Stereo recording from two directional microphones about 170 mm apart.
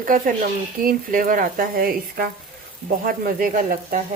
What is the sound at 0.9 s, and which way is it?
Speech, 55° right (ahead or behind).